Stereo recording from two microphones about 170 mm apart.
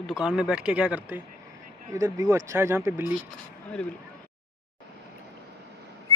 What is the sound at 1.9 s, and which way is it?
Speech, 20° right (ahead or behind).